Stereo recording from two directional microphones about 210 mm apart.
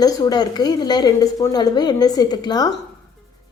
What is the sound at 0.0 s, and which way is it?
A woman's voice, 20° left (ahead or behind).